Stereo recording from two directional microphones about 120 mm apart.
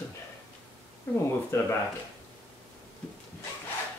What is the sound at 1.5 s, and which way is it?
Speech, 25° left (ahead or behind).